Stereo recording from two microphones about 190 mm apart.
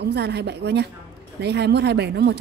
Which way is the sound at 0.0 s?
60° right (ahead or behind).